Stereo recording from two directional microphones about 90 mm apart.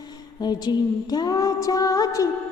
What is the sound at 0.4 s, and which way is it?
Female singing, 50° left (ahead or behind).